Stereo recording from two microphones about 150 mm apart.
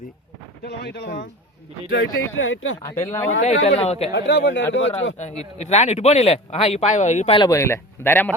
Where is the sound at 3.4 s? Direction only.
45° left (ahead or behind).